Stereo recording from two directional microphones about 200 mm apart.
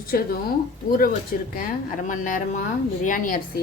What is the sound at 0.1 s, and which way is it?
A woman's voice, 45° left (ahead or behind).